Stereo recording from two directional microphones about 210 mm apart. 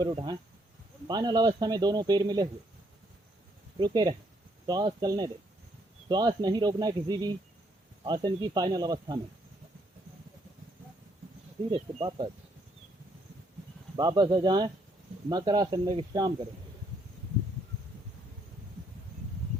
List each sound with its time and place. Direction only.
0.0 s speech: 20° right (ahead or behind)
3.8 s speech: 20° right (ahead or behind)
11.7 s speech: 20° right (ahead or behind)
13.9 s speech: 20° right (ahead or behind)